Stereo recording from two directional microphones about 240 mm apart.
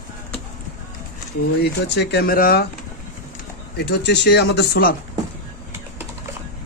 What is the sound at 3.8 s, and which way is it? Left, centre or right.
Speech, left.